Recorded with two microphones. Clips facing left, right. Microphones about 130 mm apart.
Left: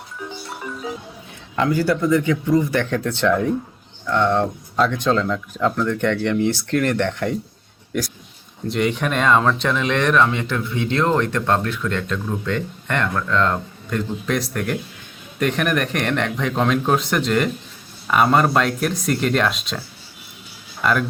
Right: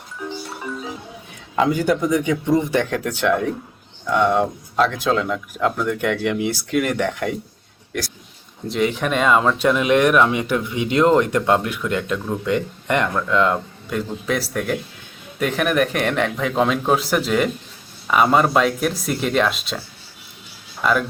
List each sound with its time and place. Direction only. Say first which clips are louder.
1.5 s speech: right 1 dB; 20° right (ahead or behind)
2.9 s speech: left 1 dB; 10° right (ahead or behind)
8.6 s a man's voice: even; centre (ahead or behind)
20.8 s a man's voice: right 1 dB; centre (ahead or behind)